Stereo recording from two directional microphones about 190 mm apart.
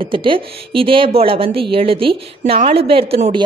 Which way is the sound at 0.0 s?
25° right (ahead or behind).